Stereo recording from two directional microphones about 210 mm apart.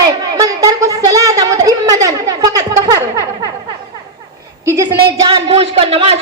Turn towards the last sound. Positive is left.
turn(degrees=-25)  # may be behind; listen again after turning